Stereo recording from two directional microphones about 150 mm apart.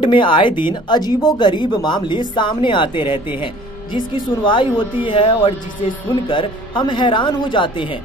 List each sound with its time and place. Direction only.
0.0 s speech: 35° left (ahead or behind)